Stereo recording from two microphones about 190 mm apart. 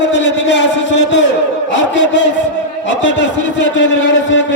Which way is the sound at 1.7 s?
70° left (ahead or behind).